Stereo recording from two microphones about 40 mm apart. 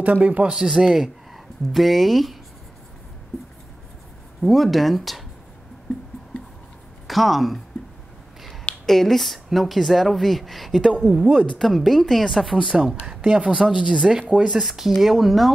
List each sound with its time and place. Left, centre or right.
0.0 s speech: right
0.7 s speech: centre
4.4 s speech: centre
7.1 s speech: centre
8.8 s speech: centre
11.1 s speech: right
11.5 s speech: centre
12.5 s speech: centre
13.7 s speech: centre
14.3 s speech: right
14.6 s speech: centre